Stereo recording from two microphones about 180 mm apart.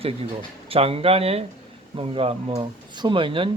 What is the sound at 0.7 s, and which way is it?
Speech, 30° right (ahead or behind).